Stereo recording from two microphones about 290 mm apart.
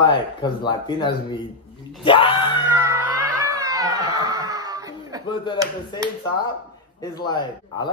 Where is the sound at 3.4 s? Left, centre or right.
Centre.